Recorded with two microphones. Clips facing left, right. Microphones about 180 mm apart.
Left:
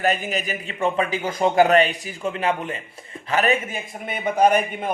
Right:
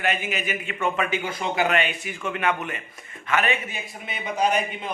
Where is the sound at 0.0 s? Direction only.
40° left (ahead or behind).